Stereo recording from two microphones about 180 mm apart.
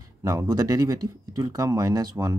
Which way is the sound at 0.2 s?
20° right (ahead or behind).